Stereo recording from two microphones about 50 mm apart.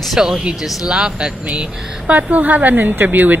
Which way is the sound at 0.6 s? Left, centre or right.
Centre.